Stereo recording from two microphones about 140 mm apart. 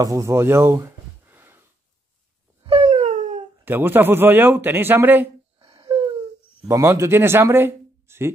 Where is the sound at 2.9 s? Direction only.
60° right (ahead or behind).